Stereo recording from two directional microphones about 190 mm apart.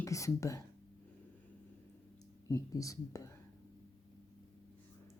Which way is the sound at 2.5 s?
15° left (ahead or behind).